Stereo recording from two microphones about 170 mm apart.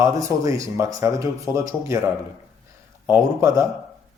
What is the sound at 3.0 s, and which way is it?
Speech, 15° right (ahead or behind).